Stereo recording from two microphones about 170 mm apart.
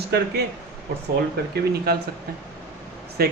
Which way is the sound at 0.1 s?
70° right (ahead or behind).